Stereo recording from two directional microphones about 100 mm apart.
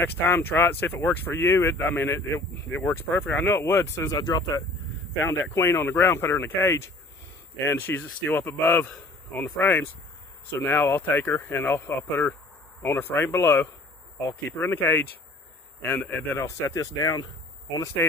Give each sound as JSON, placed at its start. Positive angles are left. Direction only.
{"t": 0.0, "sound": "speech", "side_deg": 20}
{"t": 4.2, "sound": "speech", "side_deg": 40}
{"t": 5.2, "sound": "speech", "side_deg": 25}
{"t": 16.4, "sound": "speech", "side_deg": 30}